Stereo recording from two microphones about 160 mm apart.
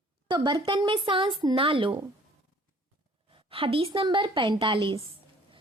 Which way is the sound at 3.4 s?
35° right (ahead or behind).